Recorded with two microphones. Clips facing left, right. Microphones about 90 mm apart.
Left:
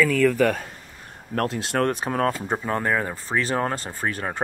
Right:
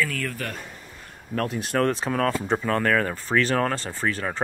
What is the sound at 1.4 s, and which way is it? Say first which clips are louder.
Speech: left 2 dB; 90° left.